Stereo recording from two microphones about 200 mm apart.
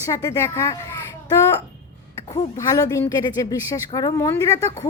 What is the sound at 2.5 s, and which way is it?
Speech, 15° left (ahead or behind).